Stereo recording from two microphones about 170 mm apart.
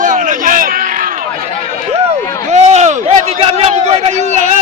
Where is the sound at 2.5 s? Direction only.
40° right (ahead or behind).